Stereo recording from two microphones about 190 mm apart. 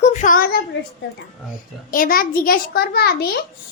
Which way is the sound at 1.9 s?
50° left (ahead or behind).